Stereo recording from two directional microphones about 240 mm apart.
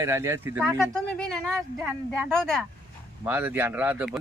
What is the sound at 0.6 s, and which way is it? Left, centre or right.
Speech, centre.